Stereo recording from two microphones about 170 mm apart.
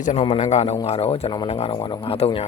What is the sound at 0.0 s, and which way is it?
Speech, 40° left (ahead or behind).